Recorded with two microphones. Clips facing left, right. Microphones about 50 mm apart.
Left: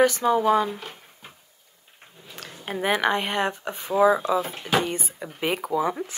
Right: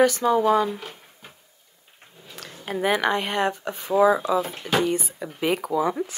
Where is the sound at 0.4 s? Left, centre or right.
Centre.